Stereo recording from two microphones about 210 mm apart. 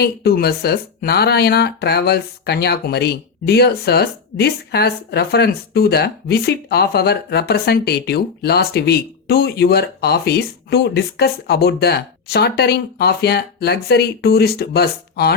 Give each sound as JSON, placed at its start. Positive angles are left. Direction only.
{"t": 0.0, "sound": "speech", "side_deg": 50}